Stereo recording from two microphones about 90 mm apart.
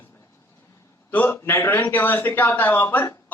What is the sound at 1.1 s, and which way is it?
A man's voice, 20° left (ahead or behind).